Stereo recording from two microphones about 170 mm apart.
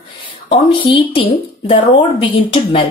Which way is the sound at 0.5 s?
30° left (ahead or behind).